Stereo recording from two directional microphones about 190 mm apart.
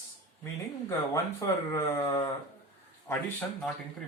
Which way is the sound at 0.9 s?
15° left (ahead or behind).